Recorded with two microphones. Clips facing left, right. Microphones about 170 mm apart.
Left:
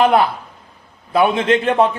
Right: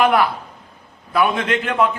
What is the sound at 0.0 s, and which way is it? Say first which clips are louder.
A man's voice: left 2 dB; 25° left (ahead or behind).